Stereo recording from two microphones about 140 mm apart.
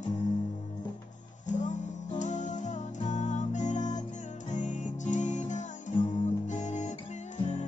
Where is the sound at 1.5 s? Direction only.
60° left (ahead or behind).